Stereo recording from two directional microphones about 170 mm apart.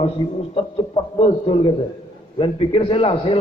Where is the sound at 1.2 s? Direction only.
35° left (ahead or behind).